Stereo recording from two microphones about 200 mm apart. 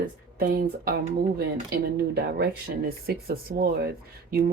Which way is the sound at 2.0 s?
55° right (ahead or behind).